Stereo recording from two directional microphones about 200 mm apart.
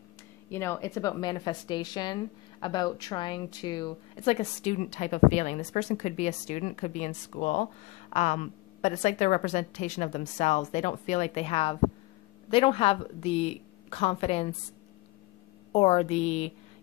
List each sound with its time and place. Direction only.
0.5 s a woman's voice: 15° left (ahead or behind); by 14.5 s 30° left (ahead or behind)
15.7 s a woman's voice: 30° left (ahead or behind)